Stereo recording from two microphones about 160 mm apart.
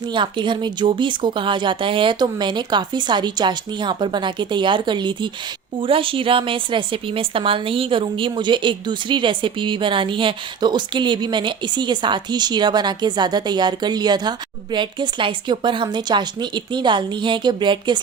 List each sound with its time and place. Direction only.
0.1 s a woman's voice: 30° right (ahead or behind)